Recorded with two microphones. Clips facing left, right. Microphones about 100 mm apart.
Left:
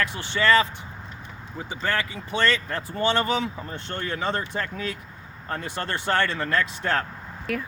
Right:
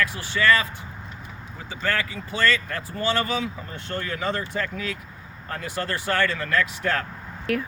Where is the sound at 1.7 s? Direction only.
20° left (ahead or behind).